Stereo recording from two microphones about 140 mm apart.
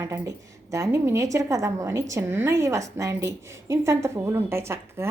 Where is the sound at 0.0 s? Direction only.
20° right (ahead or behind).